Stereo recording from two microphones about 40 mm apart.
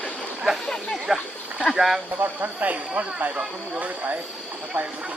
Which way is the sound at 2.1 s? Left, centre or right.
Right.